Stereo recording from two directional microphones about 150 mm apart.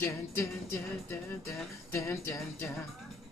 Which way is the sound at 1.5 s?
20° left (ahead or behind).